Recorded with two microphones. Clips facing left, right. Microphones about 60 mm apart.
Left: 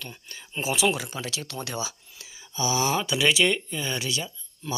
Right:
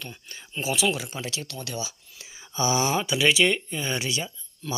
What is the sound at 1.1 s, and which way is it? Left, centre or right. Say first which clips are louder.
Speech: even; centre.